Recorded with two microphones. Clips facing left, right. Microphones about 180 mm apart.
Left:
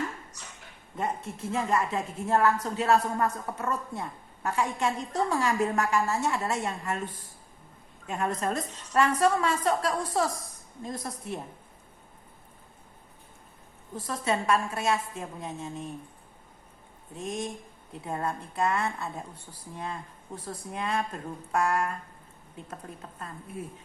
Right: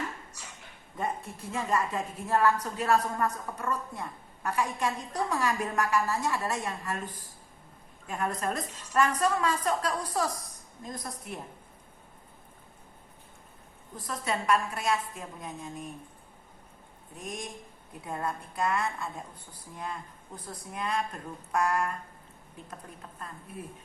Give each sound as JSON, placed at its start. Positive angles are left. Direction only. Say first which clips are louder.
{"t": 0.9, "sound": "a woman's voice", "louder": "left 2 dB", "side_deg": 25}
{"t": 13.9, "sound": "a woman's voice", "louder": "left 4 dB", "side_deg": 25}
{"t": 17.2, "sound": "a woman's voice", "louder": "left 5 dB", "side_deg": 25}